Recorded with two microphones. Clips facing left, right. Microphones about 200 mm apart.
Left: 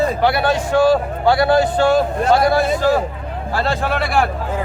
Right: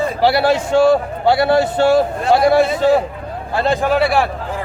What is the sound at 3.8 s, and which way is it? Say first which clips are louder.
Speech: right 3 dB; centre (ahead or behind).